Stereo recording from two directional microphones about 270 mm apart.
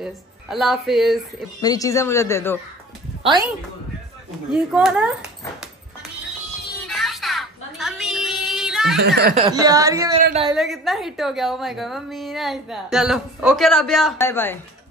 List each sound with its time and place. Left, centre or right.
0.0 s speech: centre
1.6 s speech: centre
4.5 s a woman's voice: centre
6.9 s a sound: centre
9.0 s speech: right
9.4 s speech: centre
10.5 s a woman's voice: centre